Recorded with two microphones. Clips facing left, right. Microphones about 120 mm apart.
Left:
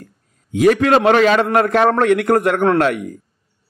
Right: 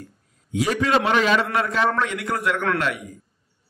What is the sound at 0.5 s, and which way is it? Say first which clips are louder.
A man's voice: left 8 dB; 60° left (ahead or behind).